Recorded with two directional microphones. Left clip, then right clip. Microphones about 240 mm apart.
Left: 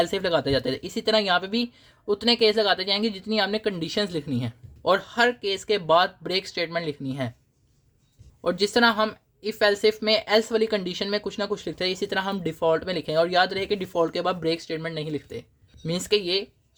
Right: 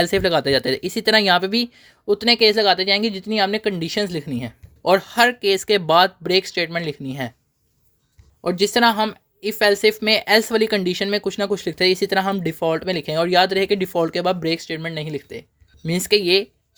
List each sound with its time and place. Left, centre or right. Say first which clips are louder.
0.0 s speech: right 5 dB; right
8.4 s speech: right 4 dB; right